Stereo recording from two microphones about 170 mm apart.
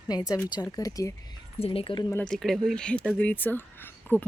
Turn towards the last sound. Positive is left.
turn(degrees=10)  # may be behind; listen again after turning